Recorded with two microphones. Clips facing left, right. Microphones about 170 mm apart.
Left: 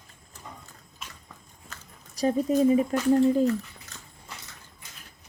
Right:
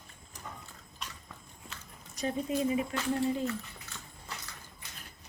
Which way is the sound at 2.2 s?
35° left (ahead or behind).